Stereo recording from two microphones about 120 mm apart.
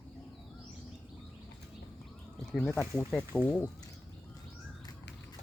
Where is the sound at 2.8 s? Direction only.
5° left (ahead or behind).